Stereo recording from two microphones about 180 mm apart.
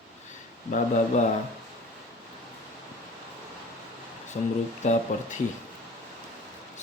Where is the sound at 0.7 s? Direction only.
45° left (ahead or behind).